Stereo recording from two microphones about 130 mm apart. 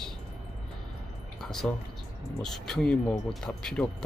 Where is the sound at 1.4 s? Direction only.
5° left (ahead or behind).